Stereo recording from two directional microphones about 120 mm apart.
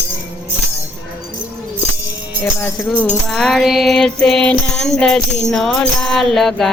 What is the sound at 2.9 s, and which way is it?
Music, 10° left (ahead or behind).